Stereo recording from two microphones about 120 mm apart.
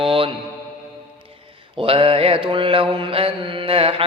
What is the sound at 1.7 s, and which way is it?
Mantra, 50° right (ahead or behind).